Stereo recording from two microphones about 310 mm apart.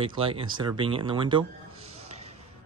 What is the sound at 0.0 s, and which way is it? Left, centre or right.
Speech, centre.